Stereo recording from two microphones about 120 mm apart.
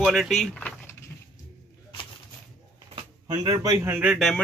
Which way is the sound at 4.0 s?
5° right (ahead or behind).